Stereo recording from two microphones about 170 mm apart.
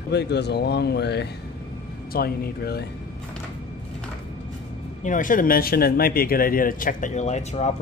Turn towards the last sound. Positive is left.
turn(degrees=40)  # may be behind; listen again after turning